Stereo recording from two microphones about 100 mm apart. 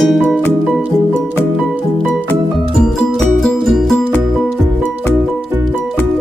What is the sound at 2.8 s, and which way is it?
Music, centre (ahead or behind).